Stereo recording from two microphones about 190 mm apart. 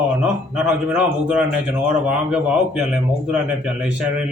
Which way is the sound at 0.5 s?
5° right (ahead or behind).